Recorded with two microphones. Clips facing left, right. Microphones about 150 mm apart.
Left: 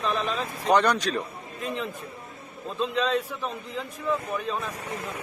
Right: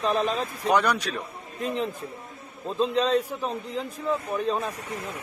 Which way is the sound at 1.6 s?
35° right (ahead or behind).